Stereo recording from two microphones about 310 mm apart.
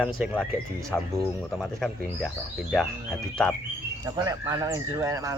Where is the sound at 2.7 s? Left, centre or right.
Centre.